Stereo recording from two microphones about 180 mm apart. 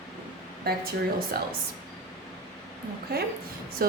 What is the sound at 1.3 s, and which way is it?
Speech, 60° right (ahead or behind).